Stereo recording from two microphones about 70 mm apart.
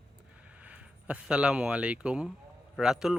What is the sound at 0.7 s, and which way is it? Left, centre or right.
Speech, centre.